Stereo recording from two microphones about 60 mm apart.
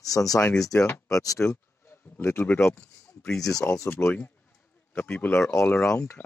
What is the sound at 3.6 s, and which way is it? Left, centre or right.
Speech, left.